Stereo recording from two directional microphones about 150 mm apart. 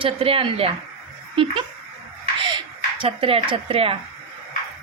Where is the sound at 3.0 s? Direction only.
40° right (ahead or behind).